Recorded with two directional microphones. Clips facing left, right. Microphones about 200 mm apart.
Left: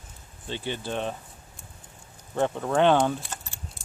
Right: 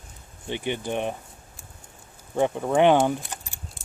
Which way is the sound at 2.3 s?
15° right (ahead or behind).